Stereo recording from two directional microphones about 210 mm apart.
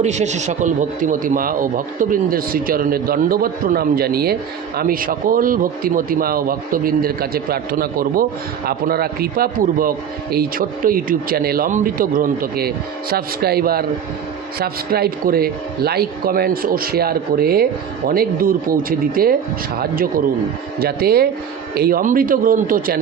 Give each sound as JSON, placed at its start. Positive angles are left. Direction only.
{"t": 0.0, "sound": "a man's voice", "side_deg": -35}